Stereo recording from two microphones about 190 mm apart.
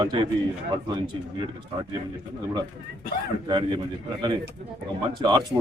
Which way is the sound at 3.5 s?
25° right (ahead or behind).